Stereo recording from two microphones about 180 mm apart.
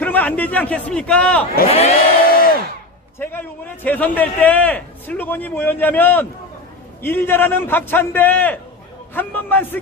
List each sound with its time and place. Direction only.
0.0 s a man's voice: 10° left (ahead or behind)
1.6 s speech: 35° left (ahead or behind)
2.3 s hair dryer: 55° left (ahead or behind)
3.2 s a sound: 10° left (ahead or behind)
3.8 s a man's voice: 10° left (ahead or behind)